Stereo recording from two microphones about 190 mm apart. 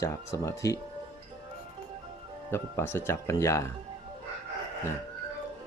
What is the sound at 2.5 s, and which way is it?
Speech, 10° left (ahead or behind).